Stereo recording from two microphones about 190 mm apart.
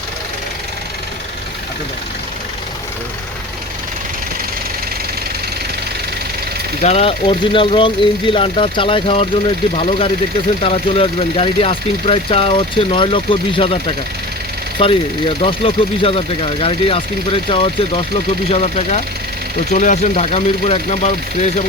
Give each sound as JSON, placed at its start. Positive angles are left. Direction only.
{"t": 6.8, "sound": "speech", "side_deg": 35}